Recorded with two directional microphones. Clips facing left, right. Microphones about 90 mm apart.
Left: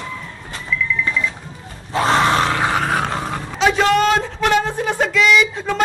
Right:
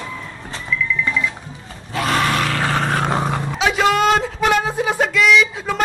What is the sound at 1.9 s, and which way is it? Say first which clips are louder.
Grunt: left 3 dB; 30° left (ahead or behind).